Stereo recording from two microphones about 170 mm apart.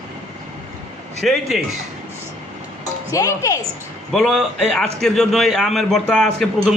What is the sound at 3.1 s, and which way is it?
Speech, 20° left (ahead or behind).